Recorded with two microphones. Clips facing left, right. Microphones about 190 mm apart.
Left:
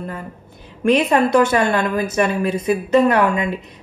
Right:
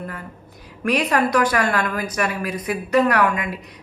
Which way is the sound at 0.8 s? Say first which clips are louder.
Left 5 dB; 25° left (ahead or behind).